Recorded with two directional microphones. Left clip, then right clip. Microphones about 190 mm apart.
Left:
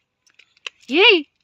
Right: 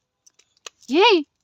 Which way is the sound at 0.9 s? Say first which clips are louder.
Left 2 dB; 20° right (ahead or behind).